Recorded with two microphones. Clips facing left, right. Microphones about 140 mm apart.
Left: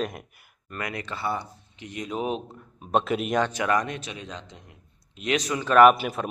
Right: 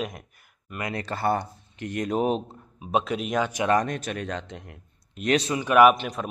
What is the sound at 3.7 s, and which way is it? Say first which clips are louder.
Speech: right 3 dB; 40° right (ahead or behind).